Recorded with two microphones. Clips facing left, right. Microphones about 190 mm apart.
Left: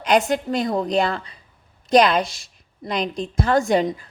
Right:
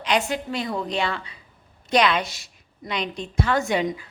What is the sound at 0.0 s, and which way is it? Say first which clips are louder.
A woman's voice: left 5 dB; 45° left (ahead or behind).